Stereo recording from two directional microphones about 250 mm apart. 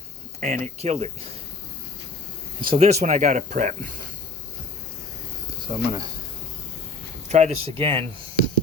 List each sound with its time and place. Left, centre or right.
0.3 s speech: right
2.6 s speech: right
5.7 s speech: centre
7.3 s speech: right